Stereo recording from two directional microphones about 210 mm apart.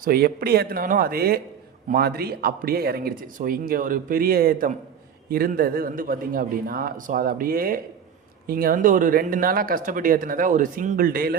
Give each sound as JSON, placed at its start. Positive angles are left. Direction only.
{"t": 0.0, "sound": "speech", "side_deg": -45}